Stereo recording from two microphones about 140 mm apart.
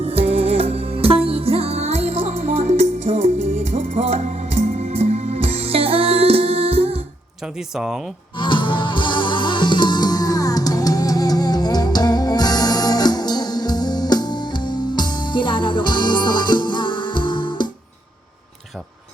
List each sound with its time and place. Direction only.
0.0 s music: 45° right (ahead or behind)
7.4 s speech: 5° right (ahead or behind)
8.4 s music: 35° left (ahead or behind)